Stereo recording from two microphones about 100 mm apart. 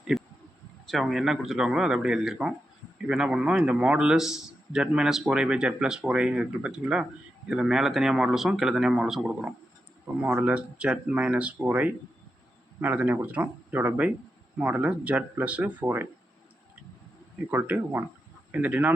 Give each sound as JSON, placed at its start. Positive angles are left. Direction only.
{"t": 0.1, "sound": "a sound", "side_deg": 0}
{"t": 0.9, "sound": "a man's voice", "side_deg": 0}
{"t": 17.5, "sound": "a man's voice", "side_deg": -20}